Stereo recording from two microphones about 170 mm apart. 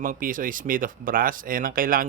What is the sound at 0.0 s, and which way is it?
Speech, 55° right (ahead or behind).